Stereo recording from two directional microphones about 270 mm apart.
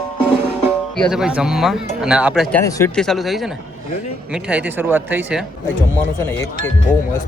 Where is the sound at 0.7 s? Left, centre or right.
Centre.